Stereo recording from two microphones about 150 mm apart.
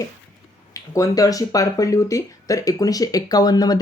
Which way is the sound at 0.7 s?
20° left (ahead or behind).